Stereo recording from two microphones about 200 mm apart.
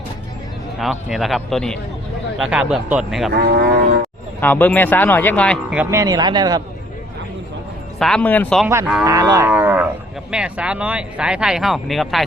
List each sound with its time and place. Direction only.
0.8 s speech: centre (ahead or behind)
3.3 s speech: 55° right (ahead or behind)
4.4 s speech: 10° left (ahead or behind)
5.7 s speech: 10° right (ahead or behind)
7.9 s speech: 5° left (ahead or behind)
8.6 s moo: 15° right (ahead or behind)
9.0 s speech: 20° right (ahead or behind)
9.5 s livestock: 10° right (ahead or behind)
10.3 s speech: 5° right (ahead or behind)